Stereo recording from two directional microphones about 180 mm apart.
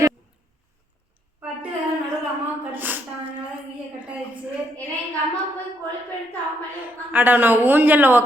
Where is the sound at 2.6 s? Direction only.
10° right (ahead or behind).